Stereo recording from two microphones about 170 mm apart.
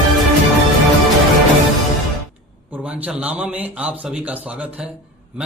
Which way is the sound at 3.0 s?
5° right (ahead or behind).